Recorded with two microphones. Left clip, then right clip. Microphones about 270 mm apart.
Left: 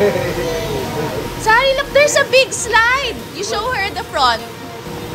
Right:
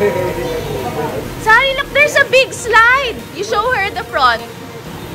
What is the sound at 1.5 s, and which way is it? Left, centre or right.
A woman's voice, centre.